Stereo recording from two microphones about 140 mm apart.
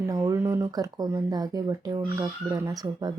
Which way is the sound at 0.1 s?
25° right (ahead or behind).